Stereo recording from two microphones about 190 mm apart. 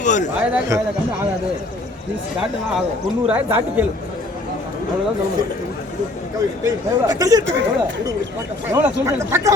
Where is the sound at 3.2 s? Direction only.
10° right (ahead or behind).